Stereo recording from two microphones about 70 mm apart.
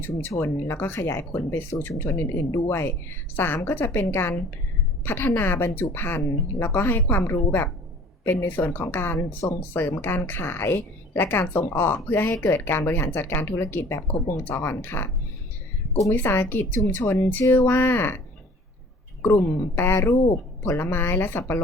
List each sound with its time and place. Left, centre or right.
0.3 s speech: left
16.1 s speech: left
19.5 s speech: left